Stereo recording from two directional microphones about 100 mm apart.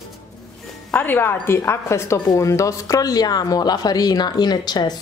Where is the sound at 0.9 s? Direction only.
20° left (ahead or behind).